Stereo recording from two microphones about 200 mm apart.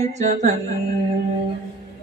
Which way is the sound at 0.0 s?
35° right (ahead or behind).